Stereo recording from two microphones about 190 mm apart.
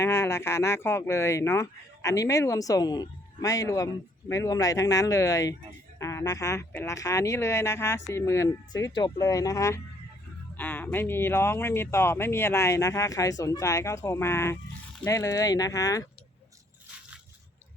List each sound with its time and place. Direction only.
0.0 s speech: 15° left (ahead or behind)